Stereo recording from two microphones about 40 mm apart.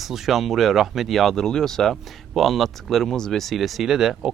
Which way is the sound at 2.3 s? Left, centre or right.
Centre.